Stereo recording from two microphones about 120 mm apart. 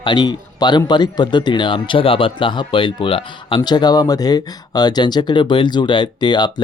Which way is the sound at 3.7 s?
35° left (ahead or behind).